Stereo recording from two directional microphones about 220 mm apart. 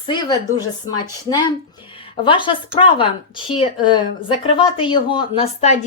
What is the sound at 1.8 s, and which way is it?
Speech, 25° left (ahead or behind).